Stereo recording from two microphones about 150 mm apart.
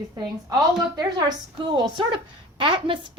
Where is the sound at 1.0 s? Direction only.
25° right (ahead or behind).